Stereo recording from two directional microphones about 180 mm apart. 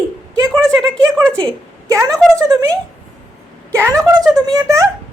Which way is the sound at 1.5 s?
20° right (ahead or behind).